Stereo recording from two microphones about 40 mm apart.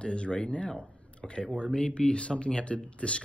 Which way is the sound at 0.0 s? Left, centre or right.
Left.